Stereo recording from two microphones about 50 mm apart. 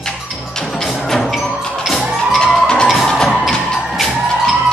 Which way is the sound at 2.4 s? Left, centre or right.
Centre.